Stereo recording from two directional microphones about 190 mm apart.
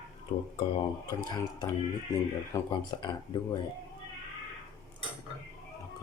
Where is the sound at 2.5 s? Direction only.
25° left (ahead or behind).